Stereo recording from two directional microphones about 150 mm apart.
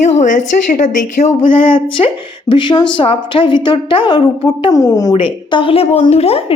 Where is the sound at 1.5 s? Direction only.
35° left (ahead or behind).